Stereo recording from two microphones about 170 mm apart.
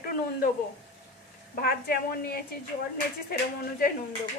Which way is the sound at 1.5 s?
60° left (ahead or behind).